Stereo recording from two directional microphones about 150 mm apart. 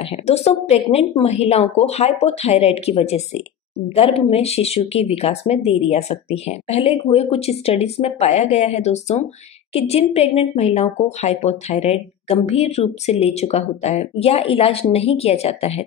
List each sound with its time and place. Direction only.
0.3 s a woman's voice: 45° left (ahead or behind)